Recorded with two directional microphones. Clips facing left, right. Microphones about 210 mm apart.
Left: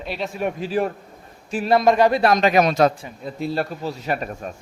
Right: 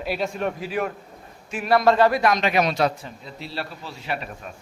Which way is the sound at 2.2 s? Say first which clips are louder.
Left 4 dB; 40° left (ahead or behind).